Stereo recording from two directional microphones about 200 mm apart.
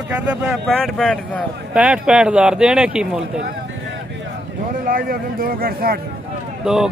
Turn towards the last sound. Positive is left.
turn(degrees=0)  # may be behind; listen again after turning